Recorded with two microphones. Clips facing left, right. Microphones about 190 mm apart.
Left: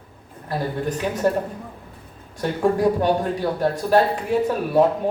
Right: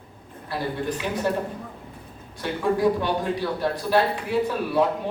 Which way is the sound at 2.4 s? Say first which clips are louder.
Left 3 dB; 45° left (ahead or behind).